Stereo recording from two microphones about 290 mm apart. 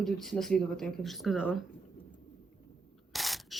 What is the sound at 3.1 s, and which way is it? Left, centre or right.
Camera, centre.